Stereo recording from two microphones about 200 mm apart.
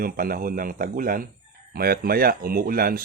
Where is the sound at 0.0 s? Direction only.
45° right (ahead or behind).